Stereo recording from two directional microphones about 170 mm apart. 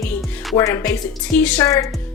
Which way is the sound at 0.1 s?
15° left (ahead or behind).